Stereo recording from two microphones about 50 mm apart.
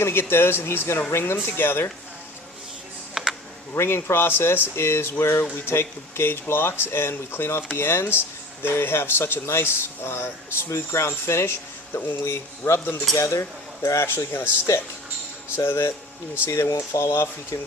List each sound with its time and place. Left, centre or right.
0.0 s speech: left
3.2 s a sound: centre
3.8 s speech: left
10.7 s speech: left
11.9 s speech: left
12.2 s speech: left
12.8 s speech: left
13.1 s speech: left
15.5 s speech: left
16.5 s speech: left